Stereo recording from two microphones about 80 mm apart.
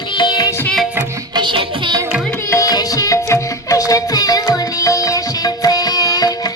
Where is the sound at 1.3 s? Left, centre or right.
Right.